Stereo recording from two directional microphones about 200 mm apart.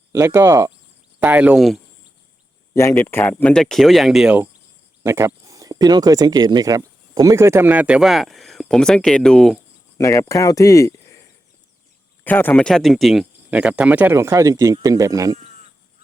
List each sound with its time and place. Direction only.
0.1 s speech: 15° right (ahead or behind)
2.7 s speech: 10° left (ahead or behind)
10.0 s speech: 15° left (ahead or behind)
12.2 s speech: 10° left (ahead or behind); by 15.4 s 15° right (ahead or behind)
15.4 s sheep: 35° right (ahead or behind)